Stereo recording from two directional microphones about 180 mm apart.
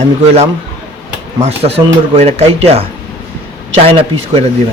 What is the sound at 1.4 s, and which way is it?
Speech, 35° right (ahead or behind).